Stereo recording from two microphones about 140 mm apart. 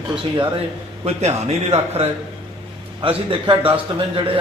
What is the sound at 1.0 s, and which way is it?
Speech, 50° right (ahead or behind).